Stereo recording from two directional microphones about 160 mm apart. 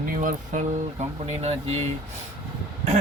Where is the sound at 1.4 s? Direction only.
40° right (ahead or behind).